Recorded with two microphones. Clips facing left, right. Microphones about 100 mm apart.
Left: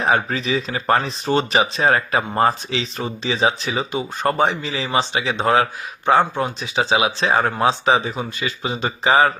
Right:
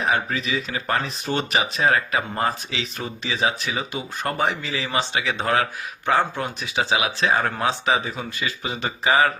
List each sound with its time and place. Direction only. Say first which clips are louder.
0.0 s speech: left 4 dB; 35° left (ahead or behind)